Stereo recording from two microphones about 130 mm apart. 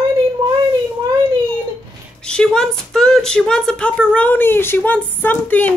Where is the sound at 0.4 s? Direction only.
35° right (ahead or behind).